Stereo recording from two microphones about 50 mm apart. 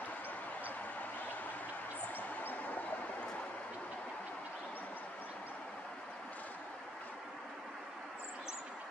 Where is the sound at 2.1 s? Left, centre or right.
Left.